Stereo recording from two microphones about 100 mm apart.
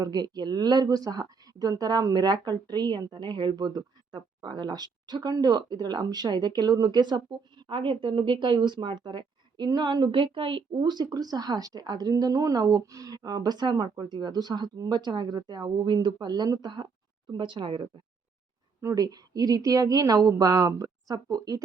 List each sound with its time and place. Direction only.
0.0 s speech: 45° right (ahead or behind)
7.7 s speech: 55° right (ahead or behind)
18.8 s speech: 30° right (ahead or behind)
19.0 s a woman's voice: 40° right (ahead or behind)